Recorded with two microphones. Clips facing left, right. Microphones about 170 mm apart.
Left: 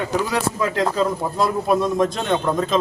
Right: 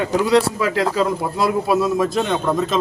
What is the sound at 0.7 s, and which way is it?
A man's voice, 5° right (ahead or behind).